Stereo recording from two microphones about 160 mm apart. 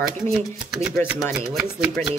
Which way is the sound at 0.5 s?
Centre (ahead or behind).